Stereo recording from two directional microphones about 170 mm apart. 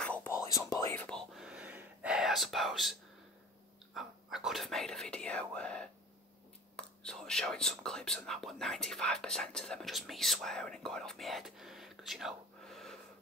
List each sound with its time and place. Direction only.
0.0 s whispering: 10° left (ahead or behind)
1.0 s whispering: centre (ahead or behind)
6.8 s speech: 5° left (ahead or behind)